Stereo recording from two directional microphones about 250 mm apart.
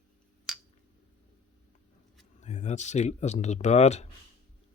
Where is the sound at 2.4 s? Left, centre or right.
Left.